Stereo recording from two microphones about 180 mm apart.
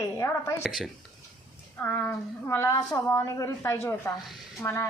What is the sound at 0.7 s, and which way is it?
Speech, centre (ahead or behind).